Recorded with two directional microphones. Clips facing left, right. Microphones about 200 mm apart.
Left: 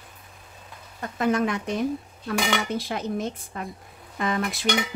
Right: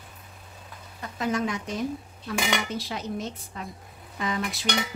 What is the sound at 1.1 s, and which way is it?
Speech, 55° left (ahead or behind).